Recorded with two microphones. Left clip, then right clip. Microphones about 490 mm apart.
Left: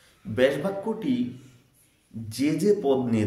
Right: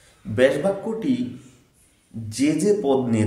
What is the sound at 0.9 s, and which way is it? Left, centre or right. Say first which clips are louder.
Speech: right 4 dB; left.